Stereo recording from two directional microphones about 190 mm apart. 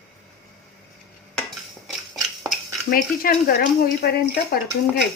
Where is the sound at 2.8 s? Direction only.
50° left (ahead or behind).